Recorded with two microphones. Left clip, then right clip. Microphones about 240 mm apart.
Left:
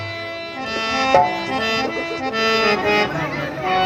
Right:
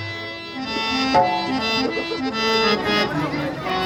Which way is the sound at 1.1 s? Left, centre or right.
Right.